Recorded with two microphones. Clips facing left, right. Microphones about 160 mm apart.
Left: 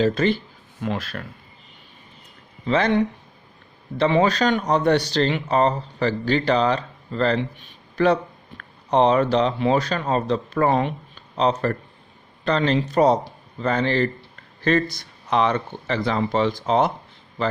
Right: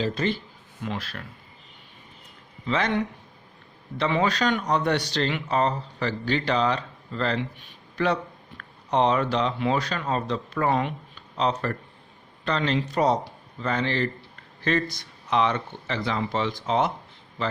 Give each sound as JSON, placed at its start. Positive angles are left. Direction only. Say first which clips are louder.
{"t": 0.0, "sound": "speech", "louder": "left 6 dB", "side_deg": 70}
{"t": 0.9, "sound": "speech", "louder": "left 5 dB", "side_deg": 55}
{"t": 2.6, "sound": "speech", "louder": "left 6 dB", "side_deg": 35}